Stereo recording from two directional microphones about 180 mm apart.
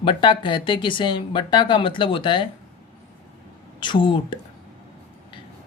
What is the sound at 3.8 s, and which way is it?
Speech, 25° left (ahead or behind).